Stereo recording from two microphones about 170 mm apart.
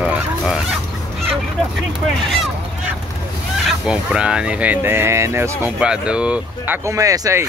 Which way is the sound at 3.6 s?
5° right (ahead or behind).